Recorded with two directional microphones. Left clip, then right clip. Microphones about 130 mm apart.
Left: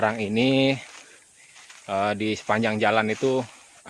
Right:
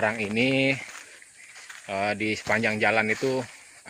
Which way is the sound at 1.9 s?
45° left (ahead or behind).